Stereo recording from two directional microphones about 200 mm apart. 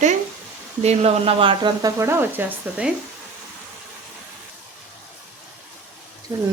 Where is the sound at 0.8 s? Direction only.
30° right (ahead or behind); by 2.9 s 10° right (ahead or behind).